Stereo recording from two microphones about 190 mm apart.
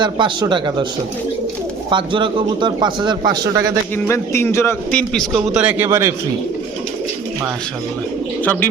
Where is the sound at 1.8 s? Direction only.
25° right (ahead or behind).